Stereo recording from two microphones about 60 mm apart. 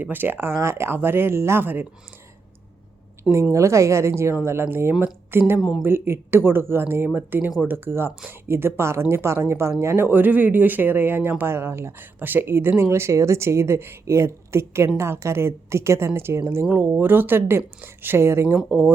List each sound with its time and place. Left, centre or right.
0.0 s speech: right
3.5 s a woman's voice: right
16.6 s speech: right